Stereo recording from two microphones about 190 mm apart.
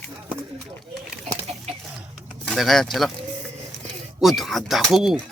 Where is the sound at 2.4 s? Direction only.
Centre (ahead or behind).